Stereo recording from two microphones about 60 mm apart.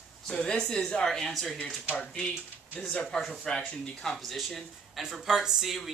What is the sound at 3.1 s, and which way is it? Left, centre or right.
Speech, centre.